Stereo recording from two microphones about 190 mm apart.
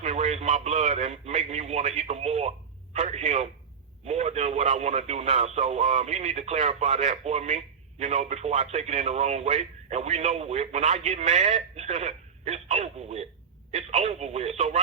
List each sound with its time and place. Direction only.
0.0 s a man's voice: 35° right (ahead or behind)